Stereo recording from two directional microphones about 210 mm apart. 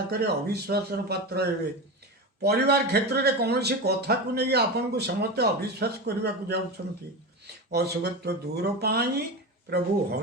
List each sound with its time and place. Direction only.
0.1 s speech: 50° right (ahead or behind)